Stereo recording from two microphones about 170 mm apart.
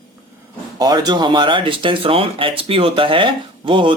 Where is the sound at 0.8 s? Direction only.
25° right (ahead or behind).